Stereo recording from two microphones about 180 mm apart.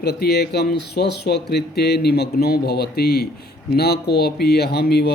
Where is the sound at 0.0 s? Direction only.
60° left (ahead or behind).